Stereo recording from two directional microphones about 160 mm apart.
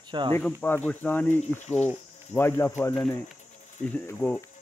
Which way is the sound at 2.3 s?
15° left (ahead or behind).